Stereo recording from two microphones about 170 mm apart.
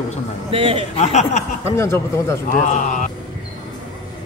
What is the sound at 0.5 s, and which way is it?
Speech, 30° right (ahead or behind).